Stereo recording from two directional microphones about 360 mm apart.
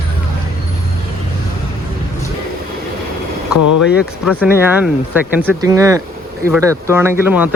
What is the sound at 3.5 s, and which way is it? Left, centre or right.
Speech, left.